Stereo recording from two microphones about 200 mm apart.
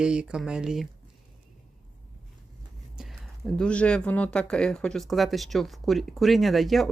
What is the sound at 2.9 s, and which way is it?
Speech, centre (ahead or behind).